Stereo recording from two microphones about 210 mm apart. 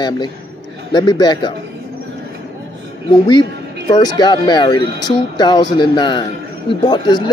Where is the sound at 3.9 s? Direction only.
20° left (ahead or behind).